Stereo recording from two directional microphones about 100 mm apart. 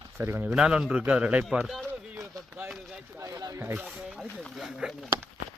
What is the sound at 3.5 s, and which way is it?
Speech, 25° right (ahead or behind).